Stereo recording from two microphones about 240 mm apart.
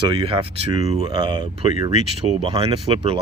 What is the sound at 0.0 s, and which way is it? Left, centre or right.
Speech, right.